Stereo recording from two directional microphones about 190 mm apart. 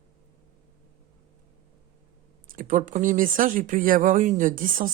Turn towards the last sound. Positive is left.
turn(degrees=-45)  # may be behind; listen again after turning